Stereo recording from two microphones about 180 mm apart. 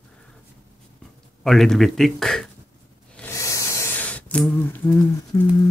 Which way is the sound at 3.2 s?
15° left (ahead or behind).